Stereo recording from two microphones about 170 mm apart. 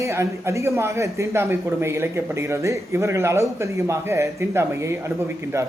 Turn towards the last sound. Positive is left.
turn(degrees=-15)  # may be behind; listen again after turning